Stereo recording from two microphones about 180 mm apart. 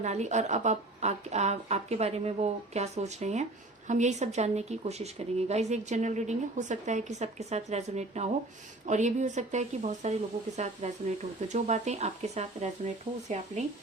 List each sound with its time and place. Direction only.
0.0 s a woman's voice: 40° right (ahead or behind)